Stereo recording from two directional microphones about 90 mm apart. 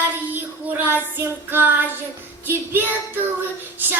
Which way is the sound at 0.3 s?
20° right (ahead or behind).